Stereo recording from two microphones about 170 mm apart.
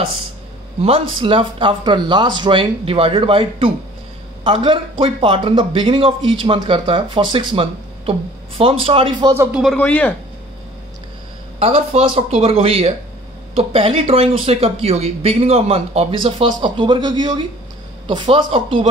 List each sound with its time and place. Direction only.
0.7 s speech: 35° right (ahead or behind)
9.8 s speech: 10° left (ahead or behind)
11.6 s speech: 35° right (ahead or behind)